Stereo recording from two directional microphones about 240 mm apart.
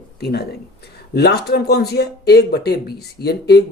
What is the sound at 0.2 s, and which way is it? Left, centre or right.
Speech, left.